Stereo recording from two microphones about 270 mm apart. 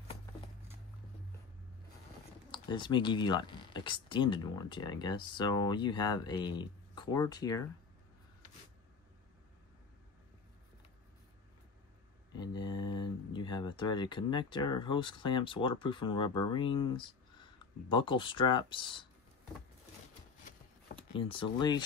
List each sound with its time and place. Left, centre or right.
2.5 s speech: centre
12.3 s speech: centre
21.2 s speech: centre